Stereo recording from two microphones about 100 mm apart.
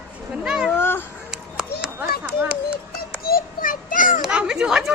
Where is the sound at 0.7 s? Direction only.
20° left (ahead or behind).